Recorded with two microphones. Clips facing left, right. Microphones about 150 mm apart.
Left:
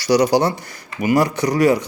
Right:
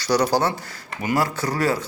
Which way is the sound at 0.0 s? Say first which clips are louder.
Left 5 dB; 15° left (ahead or behind).